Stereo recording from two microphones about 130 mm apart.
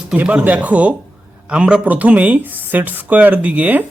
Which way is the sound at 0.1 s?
10° right (ahead or behind).